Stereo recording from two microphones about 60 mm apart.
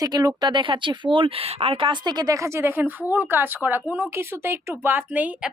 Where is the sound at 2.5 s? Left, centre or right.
Right.